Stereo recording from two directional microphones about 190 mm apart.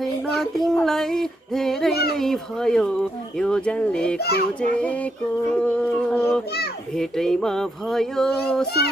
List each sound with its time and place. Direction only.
0.4 s speech: centre (ahead or behind)
4.2 s a child's voice: 55° left (ahead or behind)
4.6 s speech: 5° left (ahead or behind)